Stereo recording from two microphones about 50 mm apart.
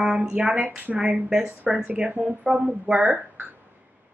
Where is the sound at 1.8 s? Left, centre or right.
Right.